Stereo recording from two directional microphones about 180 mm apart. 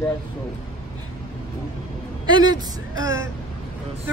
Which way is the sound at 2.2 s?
25° right (ahead or behind).